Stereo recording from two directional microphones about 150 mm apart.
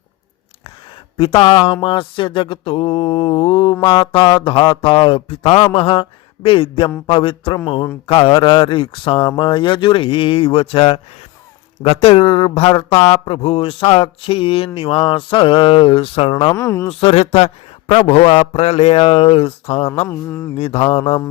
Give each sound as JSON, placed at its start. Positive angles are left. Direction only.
{"t": 1.1, "sound": "speech", "side_deg": 35}
{"t": 16.6, "sound": "speech", "side_deg": 20}
{"t": 16.9, "sound": "speech", "side_deg": 40}
{"t": 20.1, "sound": "a sound", "side_deg": 15}
{"t": 20.6, "sound": "speech", "side_deg": 40}